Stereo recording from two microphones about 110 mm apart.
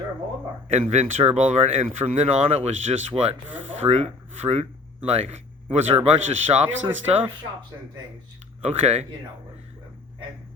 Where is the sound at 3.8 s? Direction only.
80° right.